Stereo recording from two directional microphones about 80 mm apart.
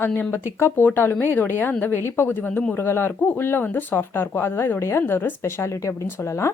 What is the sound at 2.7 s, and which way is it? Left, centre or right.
Speech, left.